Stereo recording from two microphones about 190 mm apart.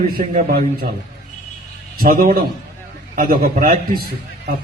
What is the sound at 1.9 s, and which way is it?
A man's voice, 50° right (ahead or behind).